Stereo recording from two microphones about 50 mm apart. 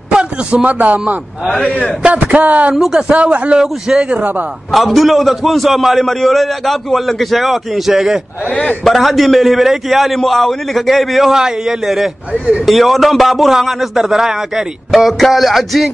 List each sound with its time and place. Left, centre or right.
0.1 s a sound: centre
0.7 s speech: right
1.7 s a man's voice: left
2.1 s speech: right
2.7 s a man's voice: centre
3.1 s a man's voice: right
4.1 s speech: right
4.6 s a man's voice: centre
12.3 s a man's voice: right
12.6 s a man's voice: centre